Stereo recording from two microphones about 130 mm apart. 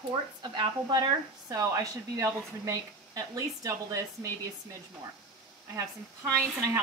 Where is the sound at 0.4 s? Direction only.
35° right (ahead or behind).